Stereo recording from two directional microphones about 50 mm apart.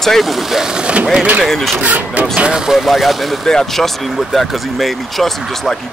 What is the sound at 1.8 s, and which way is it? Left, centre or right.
Speech, right.